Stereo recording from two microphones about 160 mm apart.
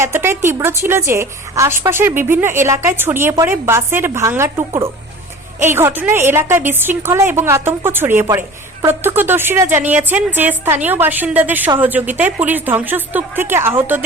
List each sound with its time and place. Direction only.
0.0 s a woman's voice: 15° right (ahead or behind)